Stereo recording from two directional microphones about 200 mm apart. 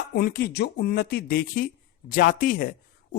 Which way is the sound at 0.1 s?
50° left (ahead or behind).